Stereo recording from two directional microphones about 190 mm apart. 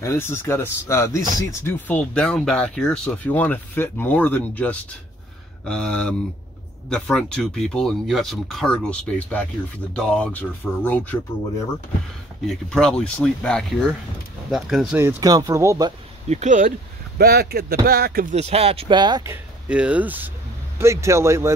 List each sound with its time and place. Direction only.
0.0 s speech: 15° left (ahead or behind)
12.4 s speech: 5° left (ahead or behind)
15.0 s speech: 15° right (ahead or behind)
16.3 s speech: 40° right (ahead or behind)
17.2 s speech: 55° right (ahead or behind)
18.3 s speech: 35° right (ahead or behind); by 21.5 s 15° right (ahead or behind)